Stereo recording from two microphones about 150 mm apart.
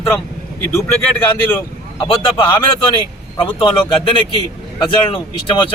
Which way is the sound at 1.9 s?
35° left (ahead or behind).